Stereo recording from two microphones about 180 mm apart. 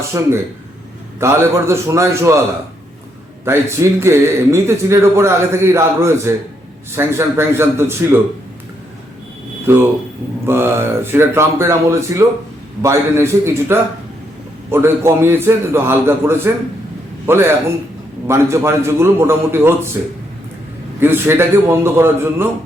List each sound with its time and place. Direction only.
0.1 s a man's voice: 15° right (ahead or behind)
3.5 s a man's voice: 15° right (ahead or behind)
9.6 s a man's voice: 15° right (ahead or behind)
21.0 s a man's voice: 10° right (ahead or behind)